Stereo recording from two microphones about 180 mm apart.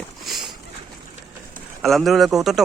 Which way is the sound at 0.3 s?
Centre (ahead or behind).